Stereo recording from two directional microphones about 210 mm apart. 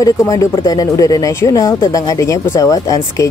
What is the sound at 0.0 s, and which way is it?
Speech, 15° left (ahead or behind).